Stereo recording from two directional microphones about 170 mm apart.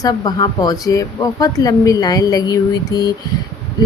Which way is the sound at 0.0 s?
25° left (ahead or behind).